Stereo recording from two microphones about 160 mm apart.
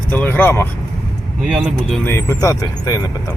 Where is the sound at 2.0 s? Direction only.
15° left (ahead or behind).